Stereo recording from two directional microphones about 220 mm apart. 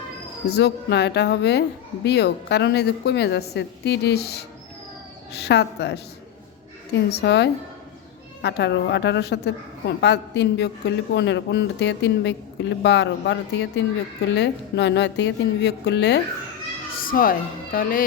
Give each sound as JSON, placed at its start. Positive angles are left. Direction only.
{"t": 0.4, "sound": "a woman's voice", "side_deg": 50}
{"t": 17.1, "sound": "speech", "side_deg": 40}